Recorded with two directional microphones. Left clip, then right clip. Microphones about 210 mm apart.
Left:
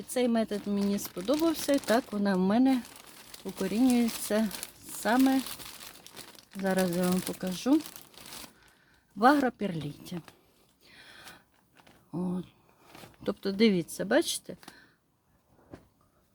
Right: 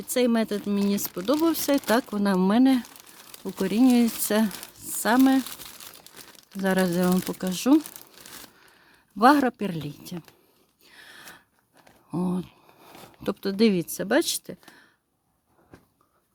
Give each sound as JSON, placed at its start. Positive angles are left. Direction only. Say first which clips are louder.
{"t": 0.1, "sound": "speech", "louder": "right 5 dB", "side_deg": -35}
{"t": 3.0, "sound": "crumpling", "louder": "right 4 dB", "side_deg": -15}
{"t": 3.6, "sound": "speech", "louder": "right 6 dB", "side_deg": -35}
{"t": 4.8, "sound": "a sound", "louder": "right 5 dB", "side_deg": -35}
{"t": 5.4, "sound": "crumpling", "louder": "right 4 dB", "side_deg": -15}
{"t": 6.6, "sound": "speech", "louder": "right 5 dB", "side_deg": -35}
{"t": 9.1, "sound": "speech", "louder": "right 5 dB", "side_deg": -30}
{"t": 10.8, "sound": "a sound", "louder": "right 4 dB", "side_deg": -25}
{"t": 12.1, "sound": "speech", "louder": "right 6 dB", "side_deg": -40}